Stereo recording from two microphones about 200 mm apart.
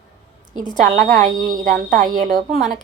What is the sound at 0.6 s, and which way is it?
A woman's voice, 40° right (ahead or behind).